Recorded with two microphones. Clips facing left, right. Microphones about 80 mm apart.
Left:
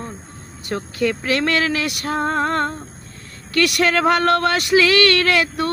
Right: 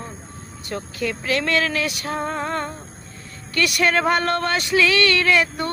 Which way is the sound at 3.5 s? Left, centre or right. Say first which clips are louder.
Left 2 dB; left.